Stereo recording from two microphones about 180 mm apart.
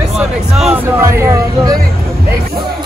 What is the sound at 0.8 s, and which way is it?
Speech, 15° right (ahead or behind).